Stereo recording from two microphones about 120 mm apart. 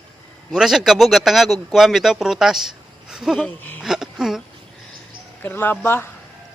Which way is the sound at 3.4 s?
15° left (ahead or behind).